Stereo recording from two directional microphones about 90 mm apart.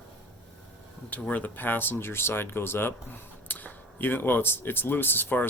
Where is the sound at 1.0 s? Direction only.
15° left (ahead or behind).